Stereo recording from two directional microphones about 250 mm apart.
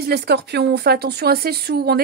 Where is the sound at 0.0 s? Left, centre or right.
Right.